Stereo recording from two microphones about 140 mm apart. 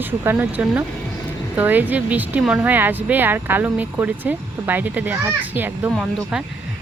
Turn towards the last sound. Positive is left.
turn(degrees=-10)  # may be behind; listen again after turning